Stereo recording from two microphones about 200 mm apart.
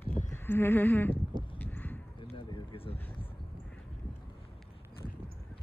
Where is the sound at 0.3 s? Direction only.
10° left (ahead or behind).